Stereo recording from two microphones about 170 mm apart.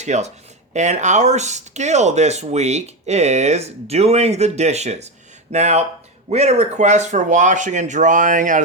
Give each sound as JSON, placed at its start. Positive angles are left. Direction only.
{"t": 0.0, "sound": "speech", "side_deg": -40}